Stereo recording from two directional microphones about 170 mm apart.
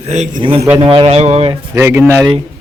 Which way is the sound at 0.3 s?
30° right (ahead or behind).